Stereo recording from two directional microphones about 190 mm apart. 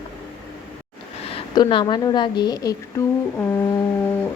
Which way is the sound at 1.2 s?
30° left (ahead or behind).